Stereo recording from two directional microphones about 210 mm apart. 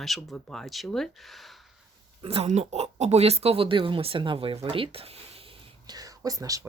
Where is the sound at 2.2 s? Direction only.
30° right (ahead or behind).